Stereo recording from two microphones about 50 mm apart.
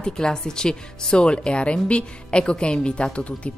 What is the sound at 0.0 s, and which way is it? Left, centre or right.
Speech, centre.